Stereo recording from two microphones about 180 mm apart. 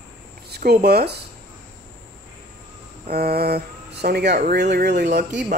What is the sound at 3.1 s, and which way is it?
Speech, 60° right (ahead or behind).